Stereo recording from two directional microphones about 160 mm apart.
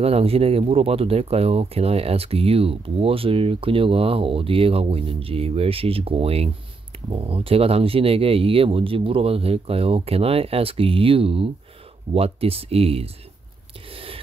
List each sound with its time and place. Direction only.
0.0 s speech: 40° right (ahead or behind)
13.9 s whispering: 35° right (ahead or behind)